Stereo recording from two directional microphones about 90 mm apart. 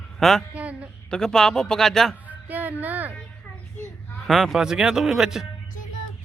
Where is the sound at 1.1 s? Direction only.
5° left (ahead or behind).